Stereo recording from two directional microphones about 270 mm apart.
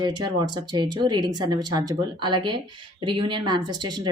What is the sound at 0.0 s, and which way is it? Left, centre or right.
Speech, centre.